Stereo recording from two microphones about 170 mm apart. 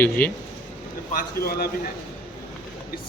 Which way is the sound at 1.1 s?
55° left (ahead or behind).